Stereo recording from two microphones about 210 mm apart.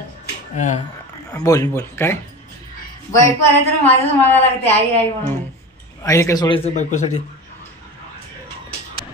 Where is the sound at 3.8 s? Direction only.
10° left (ahead or behind).